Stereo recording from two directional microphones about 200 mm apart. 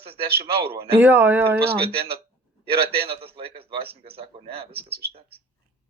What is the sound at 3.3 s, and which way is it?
A man's voice, 30° right (ahead or behind).